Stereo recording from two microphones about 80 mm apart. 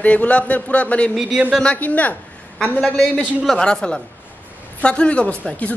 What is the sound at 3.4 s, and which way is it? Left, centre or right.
A man's voice, centre.